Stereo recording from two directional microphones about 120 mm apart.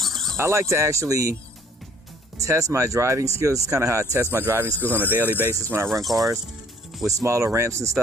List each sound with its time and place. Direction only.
0.0 s a sound: centre (ahead or behind)
0.3 s speech: 25° right (ahead or behind)
2.4 s speech: 25° right (ahead or behind)